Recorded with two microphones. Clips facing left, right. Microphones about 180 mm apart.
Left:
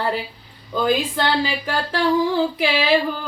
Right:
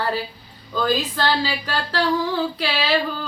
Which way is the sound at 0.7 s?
20° left (ahead or behind).